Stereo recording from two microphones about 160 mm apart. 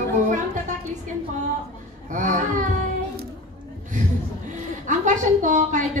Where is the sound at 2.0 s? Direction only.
55° right (ahead or behind).